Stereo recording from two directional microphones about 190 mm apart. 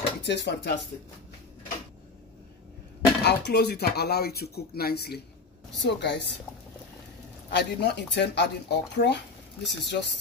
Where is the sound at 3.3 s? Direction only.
60° left (ahead or behind).